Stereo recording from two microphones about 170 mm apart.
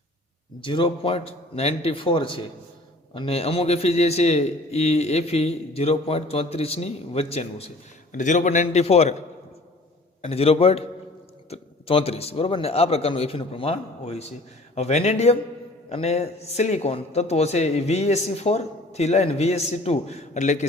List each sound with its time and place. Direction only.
0.6 s a man's voice: 30° left (ahead or behind)
8.1 s a man's voice: 45° left (ahead or behind)
10.2 s a man's voice: 35° left (ahead or behind)